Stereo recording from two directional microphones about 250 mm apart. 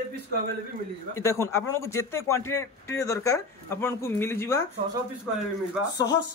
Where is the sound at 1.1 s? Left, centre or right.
Centre.